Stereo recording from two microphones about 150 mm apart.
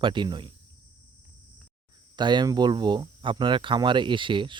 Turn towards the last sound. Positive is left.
turn(degrees=-35)  # may be behind; listen again after turning